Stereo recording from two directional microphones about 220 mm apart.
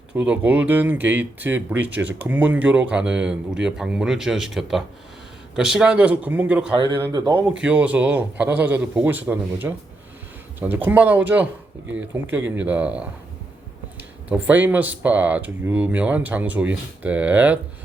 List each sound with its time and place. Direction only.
0.1 s speech: 5° right (ahead or behind)
7.1 s speech: 15° right (ahead or behind)
7.6 s speech: 5° right (ahead or behind)
14.3 s speech: 5° right (ahead or behind)